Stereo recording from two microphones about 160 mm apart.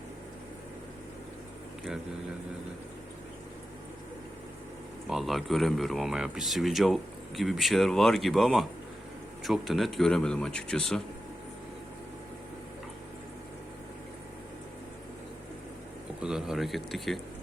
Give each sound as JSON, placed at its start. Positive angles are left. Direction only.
{"t": 5.0, "sound": "speech", "side_deg": 0}
{"t": 16.2, "sound": "speech", "side_deg": -5}